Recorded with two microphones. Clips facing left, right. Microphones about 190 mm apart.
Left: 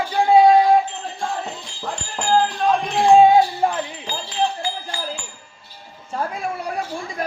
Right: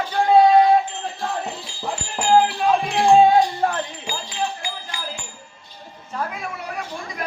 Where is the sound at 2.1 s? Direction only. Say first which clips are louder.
Right 2 dB; 10° right (ahead or behind).